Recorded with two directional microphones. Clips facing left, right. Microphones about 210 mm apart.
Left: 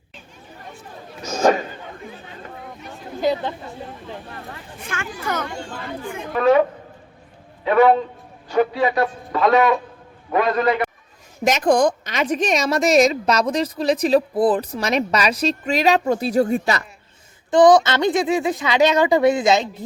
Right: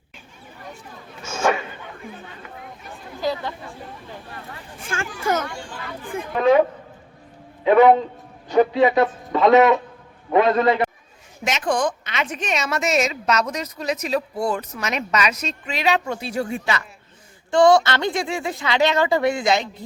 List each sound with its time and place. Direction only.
1.2 s a sound: 35° left (ahead or behind)
3.2 s speech: 20° left (ahead or behind)
4.9 s a man's voice: 30° right (ahead or behind)
7.6 s a man's voice: 20° right (ahead or behind)
11.4 s a woman's voice: 40° left (ahead or behind)
17.5 s speech: 20° left (ahead or behind)